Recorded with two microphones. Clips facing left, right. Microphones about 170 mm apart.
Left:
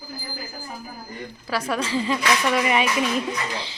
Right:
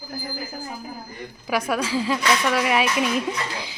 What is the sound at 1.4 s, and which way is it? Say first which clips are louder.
Speech: right 2 dB; 15° right (ahead or behind).